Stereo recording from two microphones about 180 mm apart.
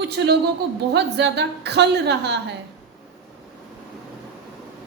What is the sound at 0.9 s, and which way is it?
A woman's voice, 70° right (ahead or behind).